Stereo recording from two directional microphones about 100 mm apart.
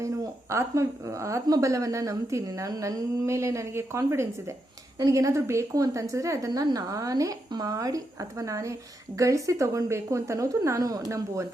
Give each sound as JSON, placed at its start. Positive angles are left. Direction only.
{"t": 0.5, "sound": "a woman's voice", "side_deg": -30}